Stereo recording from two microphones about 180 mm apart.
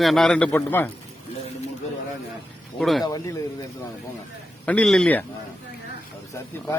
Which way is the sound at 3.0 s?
20° left (ahead or behind).